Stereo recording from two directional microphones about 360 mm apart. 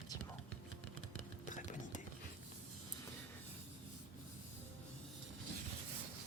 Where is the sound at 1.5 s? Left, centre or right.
Left.